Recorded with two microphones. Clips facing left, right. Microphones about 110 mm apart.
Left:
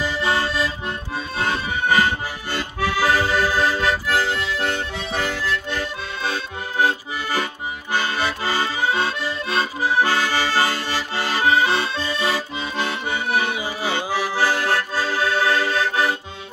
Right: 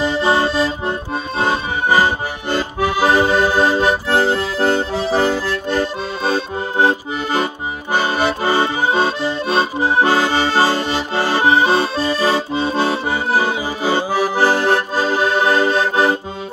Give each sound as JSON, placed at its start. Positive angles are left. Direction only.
{"t": 0.0, "sound": "accordion", "side_deg": -30}
{"t": 14.2, "sound": "accordion", "side_deg": -20}